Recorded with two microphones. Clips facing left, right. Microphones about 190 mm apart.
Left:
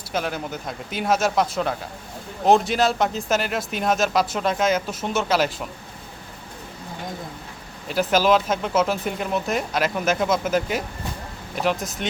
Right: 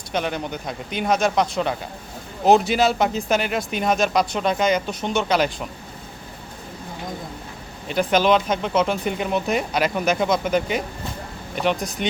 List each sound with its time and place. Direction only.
0.1 s speech: 5° left (ahead or behind)
7.9 s speech: 5° left (ahead or behind)